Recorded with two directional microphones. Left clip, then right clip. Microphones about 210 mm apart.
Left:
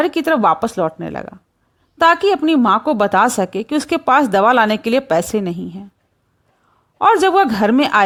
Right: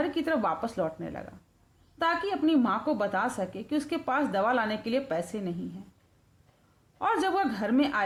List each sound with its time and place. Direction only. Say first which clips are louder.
0.0 s speech: left 14 dB; 45° left (ahead or behind)
7.0 s speech: left 15 dB; 45° left (ahead or behind)